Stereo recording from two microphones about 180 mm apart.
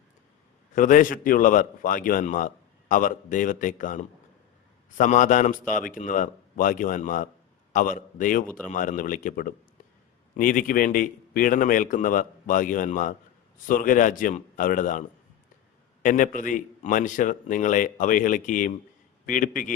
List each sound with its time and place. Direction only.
0.7 s a man's voice: 45° left (ahead or behind)
16.0 s a man's voice: 45° left (ahead or behind)